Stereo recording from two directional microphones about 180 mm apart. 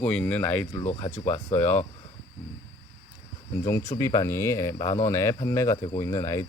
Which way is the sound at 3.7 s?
15° left (ahead or behind).